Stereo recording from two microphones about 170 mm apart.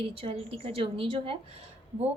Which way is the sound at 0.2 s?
35° right (ahead or behind).